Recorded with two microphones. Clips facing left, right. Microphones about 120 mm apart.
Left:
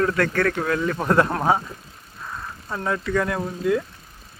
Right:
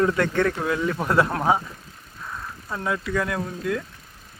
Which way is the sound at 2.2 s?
5° left (ahead or behind).